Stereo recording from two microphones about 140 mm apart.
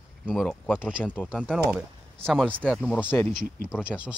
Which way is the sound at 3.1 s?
15° left (ahead or behind).